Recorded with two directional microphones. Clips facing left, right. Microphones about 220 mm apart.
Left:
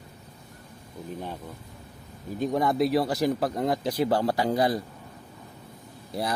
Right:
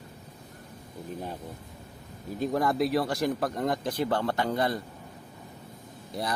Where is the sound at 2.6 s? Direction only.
Centre (ahead or behind).